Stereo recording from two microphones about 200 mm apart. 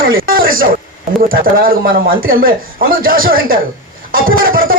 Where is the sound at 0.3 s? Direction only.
45° right (ahead or behind).